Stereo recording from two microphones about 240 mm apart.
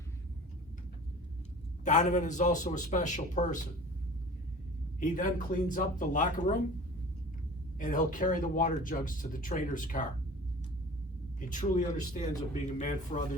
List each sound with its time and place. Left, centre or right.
1.8 s speech: left
4.9 s speech: left
7.8 s speech: left
11.3 s a man's voice: left